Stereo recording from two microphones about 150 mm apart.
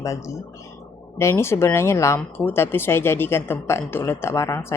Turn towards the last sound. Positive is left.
turn(degrees=20)  # may be behind; listen again after turning